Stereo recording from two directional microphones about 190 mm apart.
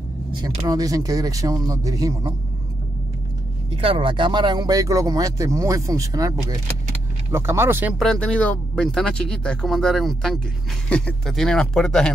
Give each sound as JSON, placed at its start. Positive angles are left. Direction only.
{"t": 0.6, "sound": "speech", "side_deg": -20}
{"t": 3.7, "sound": "speech", "side_deg": -30}
{"t": 8.0, "sound": "speech", "side_deg": 5}